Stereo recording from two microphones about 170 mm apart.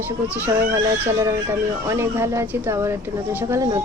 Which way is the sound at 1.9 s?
15° right (ahead or behind).